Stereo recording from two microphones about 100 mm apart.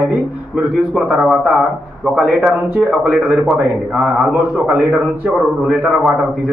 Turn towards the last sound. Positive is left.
turn(degrees=-10)  # may be behind; listen again after turning